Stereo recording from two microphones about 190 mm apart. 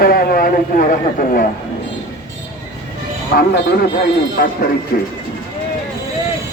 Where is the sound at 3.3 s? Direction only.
55° left (ahead or behind).